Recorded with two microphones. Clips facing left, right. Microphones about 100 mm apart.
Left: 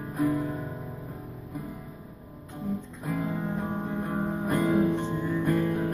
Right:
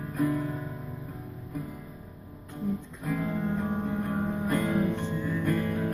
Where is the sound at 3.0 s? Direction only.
10° left (ahead or behind).